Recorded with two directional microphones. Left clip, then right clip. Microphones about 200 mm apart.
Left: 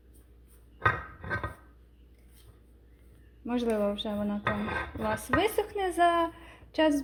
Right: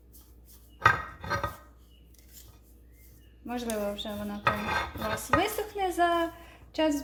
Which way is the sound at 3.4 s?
45° left (ahead or behind).